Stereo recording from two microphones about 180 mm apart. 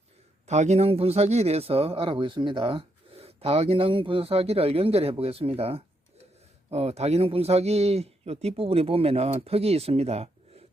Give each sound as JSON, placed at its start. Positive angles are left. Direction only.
{"t": 0.4, "sound": "speech", "side_deg": -40}